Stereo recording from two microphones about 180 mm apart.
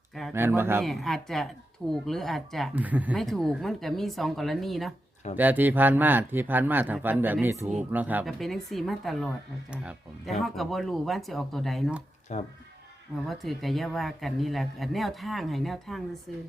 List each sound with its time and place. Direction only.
0.1 s a sound: centre (ahead or behind)
0.3 s speech: 15° right (ahead or behind)
0.8 s speech: centre (ahead or behind)
3.2 s speech: centre (ahead or behind)
12.3 s speech: 40° left (ahead or behind)
13.2 s speech: centre (ahead or behind)